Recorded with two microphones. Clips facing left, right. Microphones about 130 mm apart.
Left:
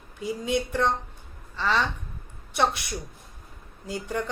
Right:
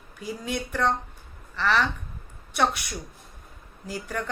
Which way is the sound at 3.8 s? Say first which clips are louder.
Left 2 dB; 25° left (ahead or behind).